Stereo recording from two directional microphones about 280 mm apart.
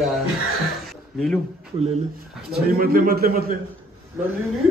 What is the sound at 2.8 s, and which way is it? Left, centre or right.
Speech, right.